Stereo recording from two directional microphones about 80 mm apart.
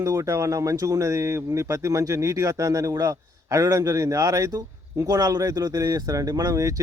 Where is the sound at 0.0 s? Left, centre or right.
Right.